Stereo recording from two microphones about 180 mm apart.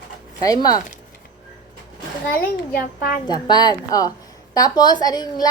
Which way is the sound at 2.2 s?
55° left (ahead or behind).